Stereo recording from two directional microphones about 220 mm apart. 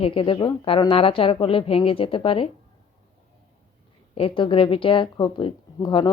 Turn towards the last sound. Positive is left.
turn(degrees=20)  # may be behind; listen again after turning